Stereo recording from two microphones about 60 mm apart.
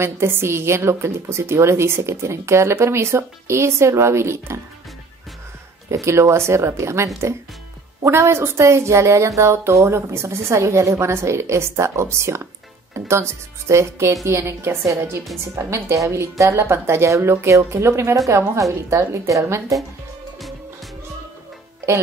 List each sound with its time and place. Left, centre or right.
0.0 s a woman's voice: right
5.9 s a woman's voice: right
18.1 s speech: right